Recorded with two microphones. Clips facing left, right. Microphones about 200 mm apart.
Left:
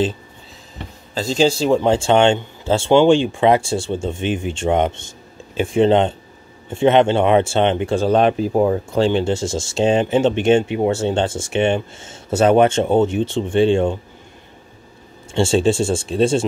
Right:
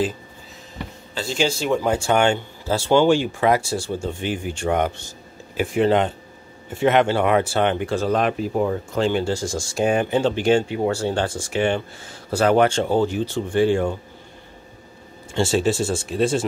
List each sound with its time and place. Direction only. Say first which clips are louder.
1.1 s speech: left 6 dB; 35° left (ahead or behind)
15.3 s speech: left 4 dB; 25° left (ahead or behind)